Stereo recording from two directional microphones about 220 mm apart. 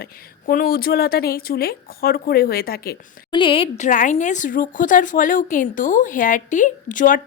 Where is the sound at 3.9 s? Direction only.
35° left (ahead or behind).